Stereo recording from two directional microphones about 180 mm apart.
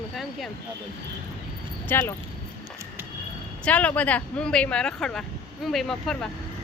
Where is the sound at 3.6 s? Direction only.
10° left (ahead or behind).